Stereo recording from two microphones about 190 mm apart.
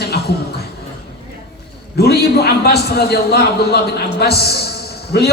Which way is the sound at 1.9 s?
55° left (ahead or behind).